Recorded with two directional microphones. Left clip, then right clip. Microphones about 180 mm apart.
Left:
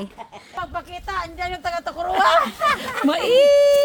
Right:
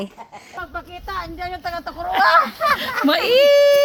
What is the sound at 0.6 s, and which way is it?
Speech, 25° left (ahead or behind).